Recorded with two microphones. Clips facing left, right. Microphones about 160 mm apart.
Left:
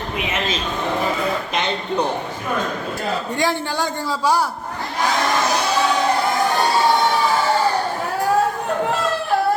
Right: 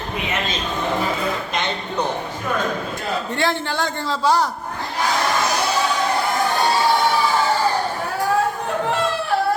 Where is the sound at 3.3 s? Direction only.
15° left (ahead or behind).